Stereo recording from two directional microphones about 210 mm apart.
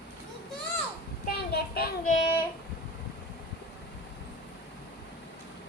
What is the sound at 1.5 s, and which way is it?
Child singing, 50° left (ahead or behind).